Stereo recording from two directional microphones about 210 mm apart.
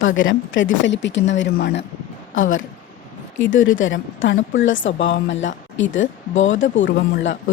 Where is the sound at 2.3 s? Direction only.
70° left (ahead or behind).